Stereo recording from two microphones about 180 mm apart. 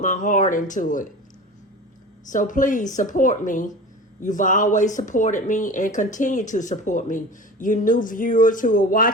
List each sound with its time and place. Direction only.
0.0 s speech: 45° left (ahead or behind)
2.3 s speech: 45° left (ahead or behind)